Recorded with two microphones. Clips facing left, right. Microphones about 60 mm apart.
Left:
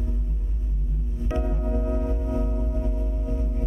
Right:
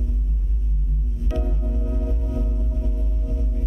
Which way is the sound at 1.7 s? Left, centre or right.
Left.